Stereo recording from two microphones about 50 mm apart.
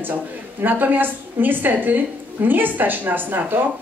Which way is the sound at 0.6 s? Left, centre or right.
Right.